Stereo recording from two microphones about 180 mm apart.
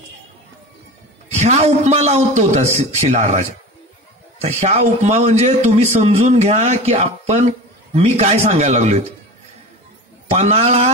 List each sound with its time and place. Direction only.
1.4 s a man's voice: 40° right (ahead or behind)
10.3 s a man's voice: 40° right (ahead or behind)